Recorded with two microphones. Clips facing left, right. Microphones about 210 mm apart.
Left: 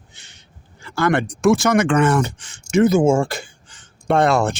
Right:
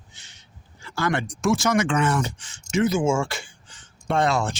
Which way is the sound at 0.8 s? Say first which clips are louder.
Left 6 dB; 55° left (ahead or behind).